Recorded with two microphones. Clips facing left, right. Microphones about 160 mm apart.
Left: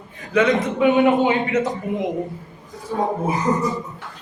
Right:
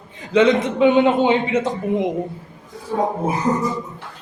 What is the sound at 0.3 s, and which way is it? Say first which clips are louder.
A man's voice: right 3 dB; 25° right (ahead or behind).